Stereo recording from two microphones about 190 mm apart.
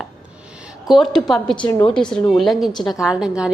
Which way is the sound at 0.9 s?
Centre (ahead or behind).